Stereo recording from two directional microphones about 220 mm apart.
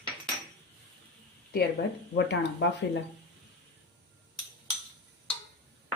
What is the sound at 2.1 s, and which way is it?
Speech, 50° left (ahead or behind).